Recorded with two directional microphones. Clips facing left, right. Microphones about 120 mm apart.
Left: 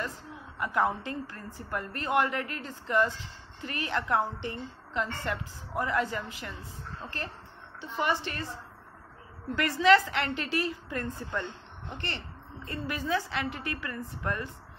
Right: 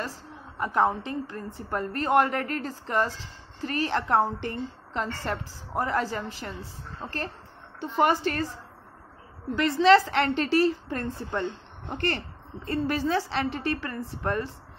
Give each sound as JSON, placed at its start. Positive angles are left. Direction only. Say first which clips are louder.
{"t": 0.6, "sound": "a woman's voice", "louder": "right 4 dB", "side_deg": -30}
{"t": 1.7, "sound": "a woman's voice", "louder": "right 6 dB", "side_deg": -35}
{"t": 7.8, "sound": "a woman's voice", "louder": "right 7 dB", "side_deg": -50}
{"t": 9.6, "sound": "a woman's voice", "louder": "right 4 dB", "side_deg": -25}
{"t": 11.9, "sound": "a woman's voice", "louder": "right 9 dB", "side_deg": -45}